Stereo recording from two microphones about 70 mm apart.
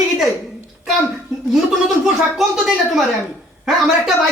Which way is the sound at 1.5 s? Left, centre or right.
Centre.